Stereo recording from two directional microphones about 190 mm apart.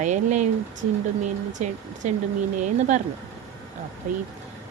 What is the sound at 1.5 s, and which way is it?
Speech, 40° right (ahead or behind).